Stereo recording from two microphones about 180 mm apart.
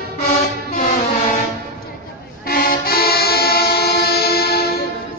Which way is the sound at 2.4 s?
55° left (ahead or behind).